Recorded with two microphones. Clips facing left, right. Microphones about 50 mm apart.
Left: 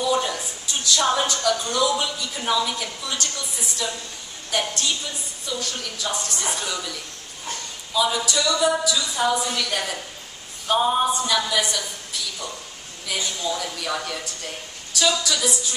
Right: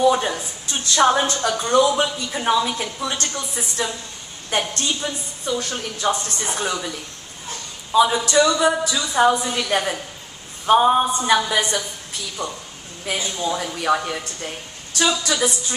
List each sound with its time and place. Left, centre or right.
0.1 s a sound: right
0.8 s a woman's voice: right
7.9 s speech: right
9.3 s a woman's voice: right
13.0 s speech: right